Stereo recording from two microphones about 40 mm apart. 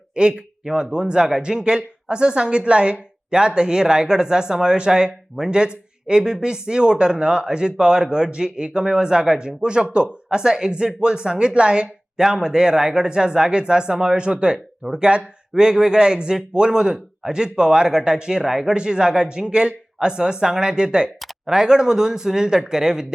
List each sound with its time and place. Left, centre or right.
0.2 s speech: right
0.6 s speech: centre
0.9 s speech: right